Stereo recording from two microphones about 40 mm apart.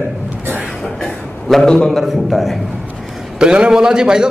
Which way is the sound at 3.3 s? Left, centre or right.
Right.